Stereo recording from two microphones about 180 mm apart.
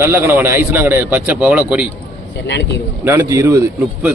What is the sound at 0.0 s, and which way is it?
Speech, 15° right (ahead or behind).